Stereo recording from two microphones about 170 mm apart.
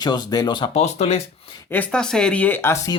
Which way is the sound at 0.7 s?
40° left (ahead or behind).